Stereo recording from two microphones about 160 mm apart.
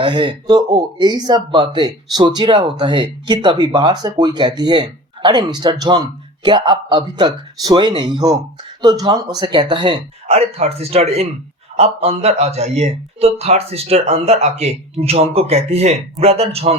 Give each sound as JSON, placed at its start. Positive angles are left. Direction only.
{"t": 0.0, "sound": "speech", "side_deg": -30}